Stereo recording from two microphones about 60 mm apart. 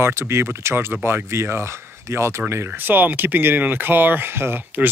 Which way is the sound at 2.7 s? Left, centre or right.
Right.